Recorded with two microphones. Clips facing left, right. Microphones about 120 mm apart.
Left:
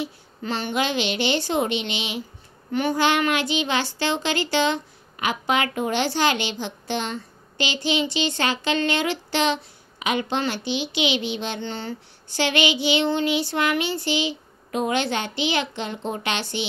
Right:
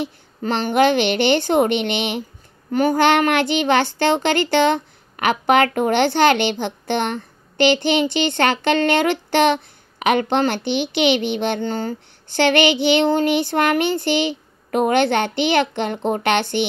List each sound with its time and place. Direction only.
0.0 s a child's voice: 50° right (ahead or behind)
2.7 s a child's voice: 45° right (ahead or behind)